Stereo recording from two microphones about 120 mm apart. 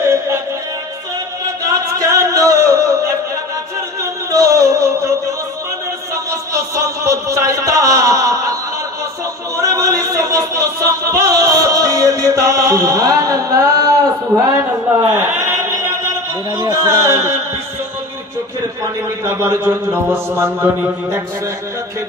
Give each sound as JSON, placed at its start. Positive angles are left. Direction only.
{"t": 0.0, "sound": "music", "side_deg": -25}
{"t": 1.7, "sound": "a sound", "side_deg": -30}
{"t": 4.0, "sound": "music", "side_deg": -25}
{"t": 6.5, "sound": "a sound", "side_deg": -25}
{"t": 9.6, "sound": "music", "side_deg": -25}
{"t": 15.1, "sound": "chant", "side_deg": -20}
{"t": 16.5, "sound": "a man's voice", "side_deg": -30}
{"t": 19.4, "sound": "a man's voice", "side_deg": -20}